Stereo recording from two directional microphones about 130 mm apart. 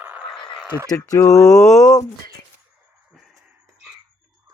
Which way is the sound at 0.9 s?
25° left (ahead or behind).